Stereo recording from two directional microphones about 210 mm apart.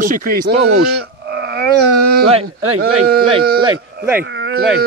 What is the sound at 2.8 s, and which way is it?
Speech, 45° right (ahead or behind).